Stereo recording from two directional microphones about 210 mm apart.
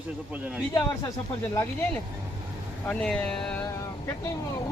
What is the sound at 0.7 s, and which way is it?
Speech, 15° left (ahead or behind).